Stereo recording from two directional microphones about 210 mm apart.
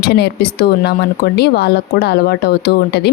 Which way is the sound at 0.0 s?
50° left (ahead or behind).